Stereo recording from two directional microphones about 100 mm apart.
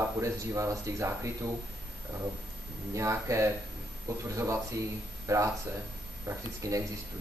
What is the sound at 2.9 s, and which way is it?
Speech, 30° right (ahead or behind).